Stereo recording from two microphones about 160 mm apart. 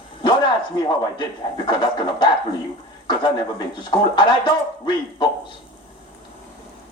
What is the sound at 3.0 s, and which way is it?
Speech, 25° left (ahead or behind).